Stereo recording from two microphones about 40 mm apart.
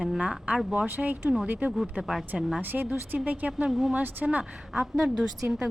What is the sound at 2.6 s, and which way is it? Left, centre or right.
Speech, right.